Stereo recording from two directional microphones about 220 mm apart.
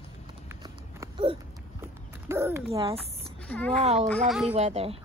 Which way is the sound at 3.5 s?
5° left (ahead or behind).